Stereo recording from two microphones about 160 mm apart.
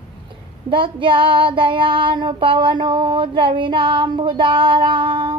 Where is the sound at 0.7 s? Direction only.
30° right (ahead or behind).